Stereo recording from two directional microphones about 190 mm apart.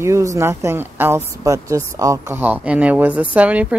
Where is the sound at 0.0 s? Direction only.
15° right (ahead or behind).